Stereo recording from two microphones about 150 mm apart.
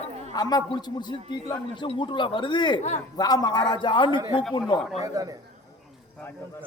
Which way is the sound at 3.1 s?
25° left (ahead or behind).